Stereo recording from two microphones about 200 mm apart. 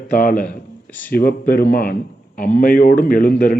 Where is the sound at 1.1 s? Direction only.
45° left (ahead or behind).